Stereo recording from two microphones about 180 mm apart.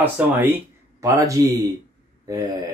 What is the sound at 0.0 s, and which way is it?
Speech, 10° right (ahead or behind).